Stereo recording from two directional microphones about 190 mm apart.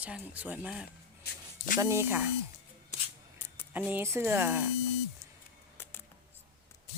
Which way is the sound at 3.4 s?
10° left (ahead or behind).